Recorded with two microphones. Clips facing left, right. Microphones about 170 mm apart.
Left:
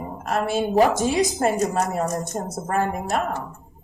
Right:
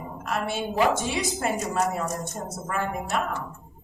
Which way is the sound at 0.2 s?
40° left (ahead or behind).